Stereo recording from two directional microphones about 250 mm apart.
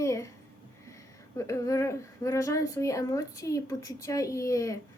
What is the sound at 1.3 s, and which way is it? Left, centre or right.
A woman's voice, centre.